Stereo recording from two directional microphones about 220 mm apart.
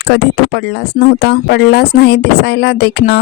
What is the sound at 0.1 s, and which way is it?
Speech, 50° left (ahead or behind).